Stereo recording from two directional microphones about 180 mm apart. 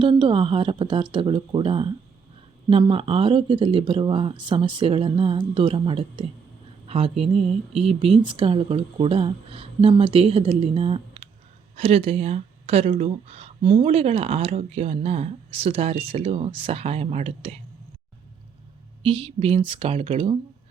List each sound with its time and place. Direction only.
0.0 s speech: 25° right (ahead or behind)
19.0 s speech: 30° right (ahead or behind)